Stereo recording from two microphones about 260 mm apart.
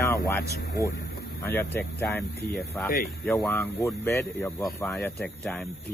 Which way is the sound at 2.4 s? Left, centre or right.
Left.